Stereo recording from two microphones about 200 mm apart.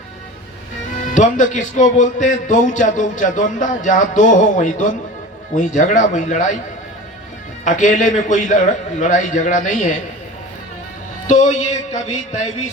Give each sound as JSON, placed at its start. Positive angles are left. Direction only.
{"t": 1.1, "sound": "a man's voice", "side_deg": 40}
{"t": 7.6, "sound": "a man's voice", "side_deg": 40}
{"t": 11.3, "sound": "a man's voice", "side_deg": 35}